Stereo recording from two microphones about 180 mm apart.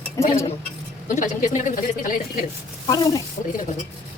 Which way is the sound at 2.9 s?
20° left (ahead or behind).